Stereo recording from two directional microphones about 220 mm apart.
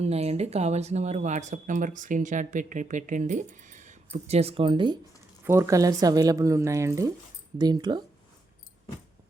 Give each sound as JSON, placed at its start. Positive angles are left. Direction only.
{"t": 0.0, "sound": "speech", "side_deg": -30}